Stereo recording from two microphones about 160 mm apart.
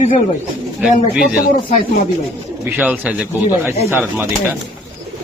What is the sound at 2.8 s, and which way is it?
Speech, 10° right (ahead or behind).